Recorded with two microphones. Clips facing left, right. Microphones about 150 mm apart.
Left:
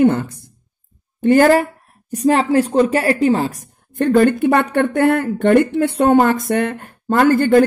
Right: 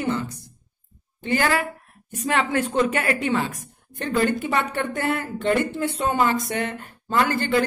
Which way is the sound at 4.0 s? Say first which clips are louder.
Left 9 dB; 55° left (ahead or behind).